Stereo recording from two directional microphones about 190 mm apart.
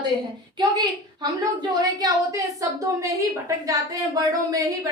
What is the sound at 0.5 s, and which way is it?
A woman's voice, 20° right (ahead or behind).